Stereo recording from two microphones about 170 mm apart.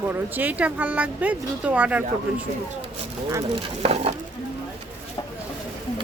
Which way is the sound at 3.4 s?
40° right (ahead or behind).